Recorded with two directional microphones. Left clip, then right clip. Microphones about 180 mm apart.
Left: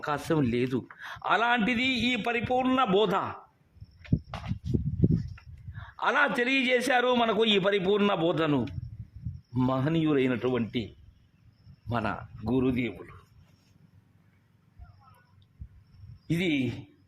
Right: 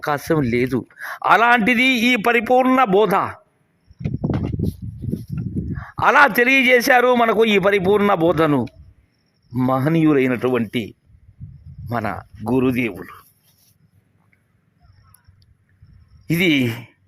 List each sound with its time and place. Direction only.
0.0 s a man's voice: 30° right (ahead or behind); by 2.6 s 45° right (ahead or behind)
2.6 s a man's voice: 35° right (ahead or behind)
4.0 s a sound: 60° right (ahead or behind)
5.7 s a man's voice: 35° right (ahead or behind)
9.7 s a man's voice: 35° right (ahead or behind)
11.9 s speech: 20° right (ahead or behind)
12.5 s a man's voice: 40° right (ahead or behind)
16.2 s speech: 35° right (ahead or behind)